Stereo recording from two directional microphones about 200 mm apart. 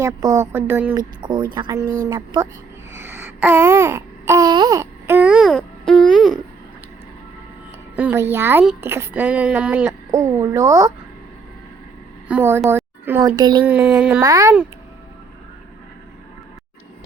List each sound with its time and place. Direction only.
0.0 s a woman's voice: 15° right (ahead or behind)
0.9 s a woman's voice: 20° right (ahead or behind)
2.9 s a sound: 10° right (ahead or behind)
7.9 s a woman's voice: 10° right (ahead or behind)
12.3 s a woman's voice: 10° right (ahead or behind)
13.7 s a woman's voice: 5° right (ahead or behind)
14.3 s a woman's voice: 15° right (ahead or behind)